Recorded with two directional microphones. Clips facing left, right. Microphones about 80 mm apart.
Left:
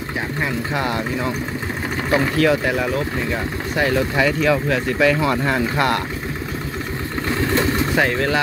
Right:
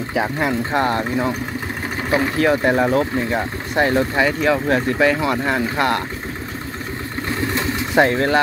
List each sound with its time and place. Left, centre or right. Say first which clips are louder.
0.5 s speech: right 3 dB; right
2.0 s speech: even; centre
2.6 s speech: right 4 dB; right
4.2 s speech: left 2 dB; right
5.1 s speech: even; centre
7.9 s speech: right 7 dB; right